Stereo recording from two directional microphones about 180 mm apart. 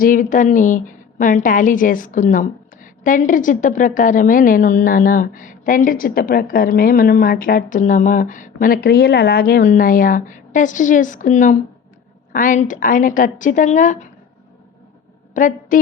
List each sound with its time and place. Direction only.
0.0 s a woman's voice: 50° left (ahead or behind)
15.4 s a woman's voice: 45° left (ahead or behind)